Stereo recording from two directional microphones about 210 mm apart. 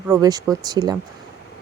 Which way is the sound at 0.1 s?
15° right (ahead or behind).